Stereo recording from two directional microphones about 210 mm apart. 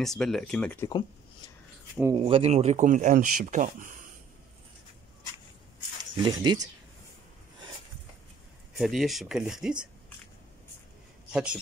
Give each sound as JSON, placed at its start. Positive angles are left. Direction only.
{"t": 0.0, "sound": "speech", "side_deg": 0}
{"t": 2.1, "sound": "speech", "side_deg": -25}
{"t": 6.2, "sound": "speech", "side_deg": -20}
{"t": 8.7, "sound": "speech", "side_deg": 0}
{"t": 11.3, "sound": "speech", "side_deg": -5}